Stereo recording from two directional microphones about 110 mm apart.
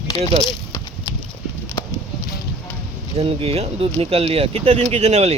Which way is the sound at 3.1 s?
60° right (ahead or behind).